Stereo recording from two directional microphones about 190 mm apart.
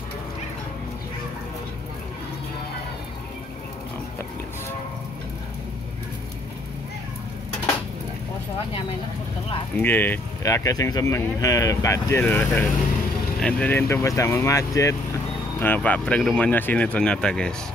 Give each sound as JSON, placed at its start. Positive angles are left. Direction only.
{"t": 9.8, "sound": "speech", "side_deg": 10}